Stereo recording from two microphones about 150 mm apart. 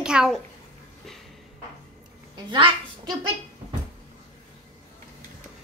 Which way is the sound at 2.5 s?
30° right (ahead or behind).